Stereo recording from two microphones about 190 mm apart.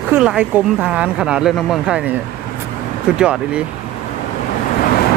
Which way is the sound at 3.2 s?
5° right (ahead or behind).